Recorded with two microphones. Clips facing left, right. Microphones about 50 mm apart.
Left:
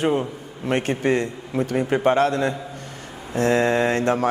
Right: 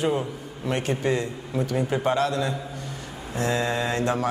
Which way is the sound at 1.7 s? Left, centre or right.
Left.